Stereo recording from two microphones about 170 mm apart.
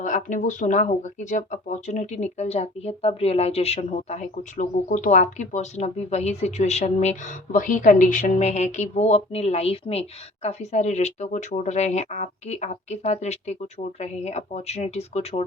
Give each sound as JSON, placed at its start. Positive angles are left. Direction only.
{"t": 0.0, "sound": "speech", "side_deg": 45}